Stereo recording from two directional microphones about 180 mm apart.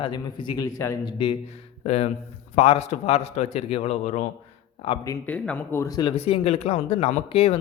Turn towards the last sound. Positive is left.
turn(degrees=35)  # may be behind; listen again after turning